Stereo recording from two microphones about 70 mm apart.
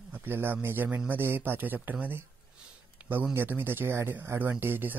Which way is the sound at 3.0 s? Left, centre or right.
Centre.